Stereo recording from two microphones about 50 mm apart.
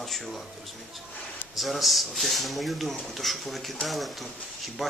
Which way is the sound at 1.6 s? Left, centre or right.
Centre.